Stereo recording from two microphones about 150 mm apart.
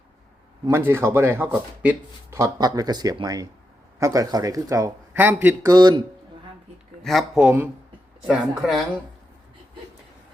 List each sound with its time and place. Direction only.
0.6 s speech: 15° right (ahead or behind)
2.3 s speech: 25° right (ahead or behind)
5.1 s speech: 10° right (ahead or behind)
5.6 s speech: 25° right (ahead or behind)
7.0 s a woman's voice: centre (ahead or behind)